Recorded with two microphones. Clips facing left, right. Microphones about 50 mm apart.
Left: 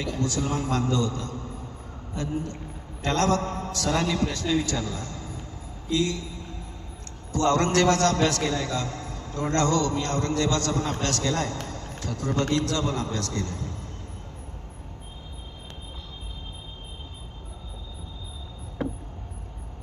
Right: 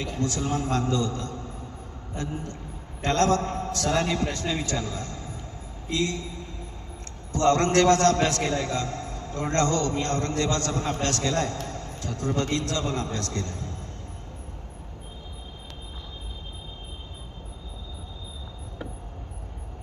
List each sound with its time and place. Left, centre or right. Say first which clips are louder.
0.0 s a man's voice: left 1 dB; right
11.6 s a sound: right 1 dB; right
12.0 s a man's voice: left 1 dB; right